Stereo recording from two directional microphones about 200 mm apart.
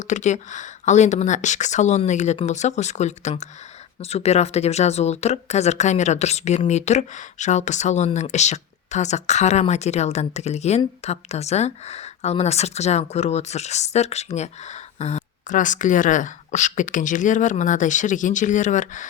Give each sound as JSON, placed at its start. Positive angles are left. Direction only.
{"t": 0.1, "sound": "speech", "side_deg": 35}